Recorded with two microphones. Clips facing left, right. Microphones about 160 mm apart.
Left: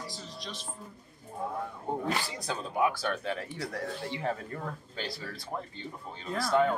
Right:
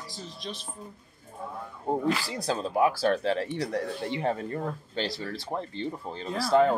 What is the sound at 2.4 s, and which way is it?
Speech, 35° right (ahead or behind).